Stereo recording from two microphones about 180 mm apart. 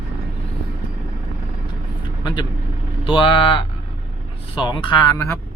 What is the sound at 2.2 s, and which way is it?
Vehicle, 25° left (ahead or behind).